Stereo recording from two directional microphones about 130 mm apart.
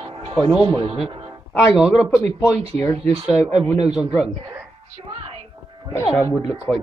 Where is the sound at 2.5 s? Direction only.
55° right (ahead or behind).